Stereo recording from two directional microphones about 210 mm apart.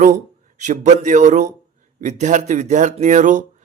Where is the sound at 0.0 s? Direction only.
35° right (ahead or behind).